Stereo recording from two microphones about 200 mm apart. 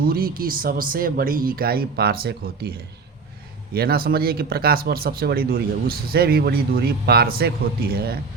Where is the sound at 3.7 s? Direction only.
50° right (ahead or behind).